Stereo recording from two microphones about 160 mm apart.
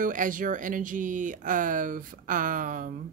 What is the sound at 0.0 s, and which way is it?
A woman's voice, 55° right (ahead or behind).